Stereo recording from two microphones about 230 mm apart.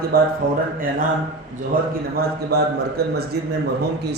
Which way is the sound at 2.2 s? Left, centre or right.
Right.